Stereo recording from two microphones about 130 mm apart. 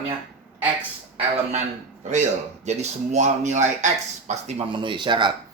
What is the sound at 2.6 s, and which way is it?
Speech, 60° right (ahead or behind).